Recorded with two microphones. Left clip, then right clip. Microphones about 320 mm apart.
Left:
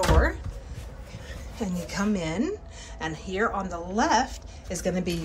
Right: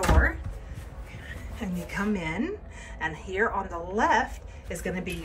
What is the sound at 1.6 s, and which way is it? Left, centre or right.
A woman's voice, centre.